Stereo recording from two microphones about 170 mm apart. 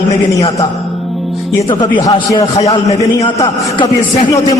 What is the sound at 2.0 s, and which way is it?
A man's voice, 25° left (ahead or behind).